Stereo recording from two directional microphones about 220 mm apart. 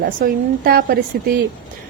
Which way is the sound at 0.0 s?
40° right (ahead or behind).